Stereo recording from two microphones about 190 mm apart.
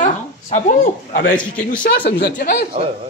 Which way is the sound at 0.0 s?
40° left (ahead or behind).